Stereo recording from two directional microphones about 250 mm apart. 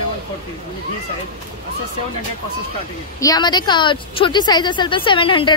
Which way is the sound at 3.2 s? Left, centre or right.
Centre.